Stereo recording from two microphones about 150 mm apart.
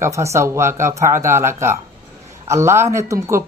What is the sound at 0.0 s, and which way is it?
Speech, 20° right (ahead or behind).